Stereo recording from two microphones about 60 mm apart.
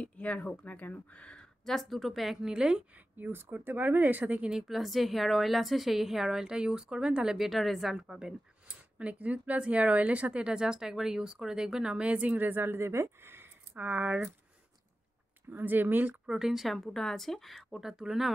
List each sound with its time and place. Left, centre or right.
0.0 s speech: left
1.6 s a woman's voice: centre
3.2 s speech: right
4.5 s a woman's voice: centre
8.9 s speech: right
13.7 s speech: right
15.5 s speech: right
16.3 s a woman's voice: centre